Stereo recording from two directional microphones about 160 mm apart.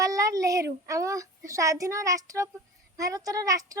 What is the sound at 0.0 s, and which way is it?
A child's voice, 20° right (ahead or behind).